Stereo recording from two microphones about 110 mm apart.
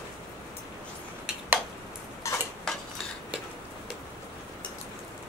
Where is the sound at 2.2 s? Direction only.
30° left (ahead or behind).